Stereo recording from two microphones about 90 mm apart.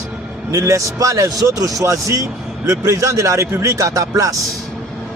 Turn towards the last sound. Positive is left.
turn(degrees=-40)  # may be behind; listen again after turning